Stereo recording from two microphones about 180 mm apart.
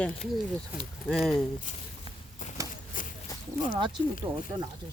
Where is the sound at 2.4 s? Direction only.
45° left (ahead or behind).